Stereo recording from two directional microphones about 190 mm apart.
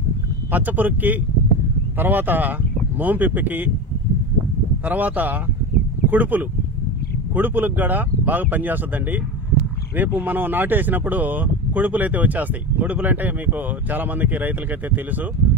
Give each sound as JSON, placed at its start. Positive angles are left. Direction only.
{"t": 0.5, "sound": "speech", "side_deg": -10}
{"t": 4.8, "sound": "speech", "side_deg": -10}